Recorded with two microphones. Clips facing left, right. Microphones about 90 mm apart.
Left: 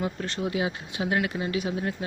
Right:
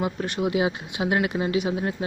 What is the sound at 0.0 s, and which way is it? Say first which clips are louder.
Speech: right 4 dB; 15° right (ahead or behind).